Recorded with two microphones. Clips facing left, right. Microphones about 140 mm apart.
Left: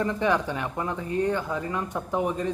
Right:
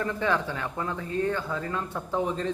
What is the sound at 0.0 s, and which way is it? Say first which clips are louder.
Speech: left 3 dB; 20° left (ahead or behind).